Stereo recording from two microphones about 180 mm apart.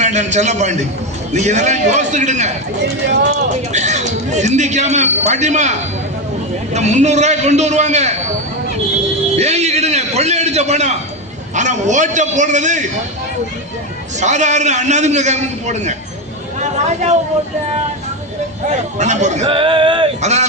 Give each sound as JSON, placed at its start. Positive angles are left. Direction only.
{"t": 0.0, "sound": "a man's voice", "side_deg": -40}
{"t": 3.7, "sound": "a man's voice", "side_deg": -40}
{"t": 6.7, "sound": "a man's voice", "side_deg": -40}
{"t": 9.3, "sound": "a sound", "side_deg": -35}
{"t": 11.5, "sound": "a man's voice", "side_deg": -40}
{"t": 14.2, "sound": "a man's voice", "side_deg": -40}
{"t": 16.6, "sound": "a sound", "side_deg": -40}
{"t": 18.7, "sound": "a man's voice", "side_deg": -40}
{"t": 20.2, "sound": "a man's voice", "side_deg": -40}